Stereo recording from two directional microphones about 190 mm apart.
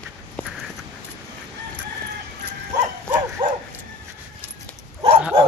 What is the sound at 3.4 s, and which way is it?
Bow-wow, 25° right (ahead or behind).